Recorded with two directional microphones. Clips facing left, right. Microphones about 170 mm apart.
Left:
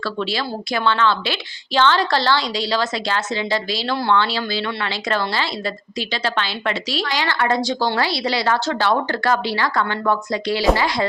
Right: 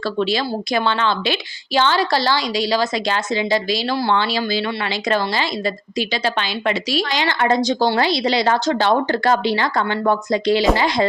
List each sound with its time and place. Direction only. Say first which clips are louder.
0.2 s a woman's voice: right 6 dB; 20° right (ahead or behind)